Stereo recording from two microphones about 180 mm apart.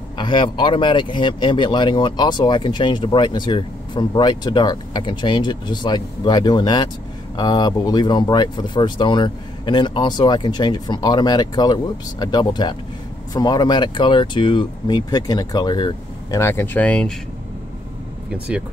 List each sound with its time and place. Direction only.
0.2 s speech: 25° left (ahead or behind); by 17.1 s 10° left (ahead or behind)